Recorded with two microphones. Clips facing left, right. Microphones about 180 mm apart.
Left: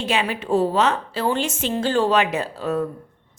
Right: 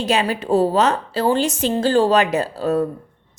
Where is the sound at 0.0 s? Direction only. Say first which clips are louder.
Right 4 dB; 40° right (ahead or behind).